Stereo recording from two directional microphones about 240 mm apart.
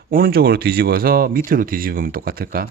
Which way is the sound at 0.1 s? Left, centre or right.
Right.